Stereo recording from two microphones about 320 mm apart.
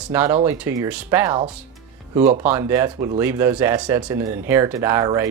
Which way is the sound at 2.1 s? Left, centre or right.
Right.